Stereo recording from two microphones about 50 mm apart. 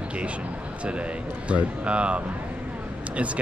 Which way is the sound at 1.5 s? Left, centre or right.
Right.